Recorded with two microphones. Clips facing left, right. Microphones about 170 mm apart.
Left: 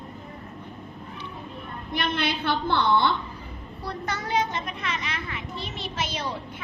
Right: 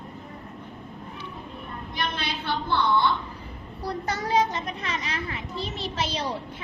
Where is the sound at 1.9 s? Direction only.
60° left (ahead or behind).